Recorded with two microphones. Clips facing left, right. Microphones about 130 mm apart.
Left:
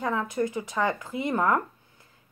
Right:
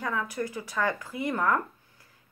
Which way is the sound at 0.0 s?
25° left (ahead or behind).